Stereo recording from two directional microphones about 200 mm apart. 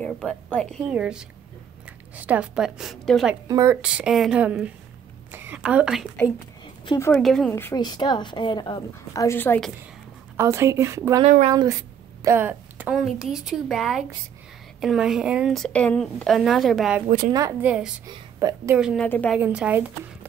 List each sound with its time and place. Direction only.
0.0 s a woman's voice: 5° left (ahead or behind)
3.4 s a woman's voice: 20° right (ahead or behind)
3.8 s a woman's voice: 5° right (ahead or behind)
7.1 s a woman's voice: centre (ahead or behind)
10.3 s speech: 15° right (ahead or behind)
11.2 s speech: 35° right (ahead or behind)
12.2 s a woman's voice: 10° right (ahead or behind)
17.3 s speech: 15° right (ahead or behind)
18.0 s a woman's voice: 20° right (ahead or behind)
18.9 s a woman's voice: 10° left (ahead or behind)
19.3 s a woman's voice: 5° right (ahead or behind)